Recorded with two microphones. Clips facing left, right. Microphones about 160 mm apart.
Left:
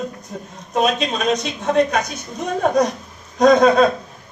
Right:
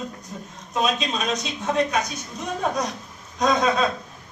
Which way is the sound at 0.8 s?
55° left (ahead or behind).